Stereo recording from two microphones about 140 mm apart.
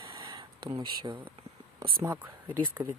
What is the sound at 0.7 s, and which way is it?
Speech, 30° right (ahead or behind).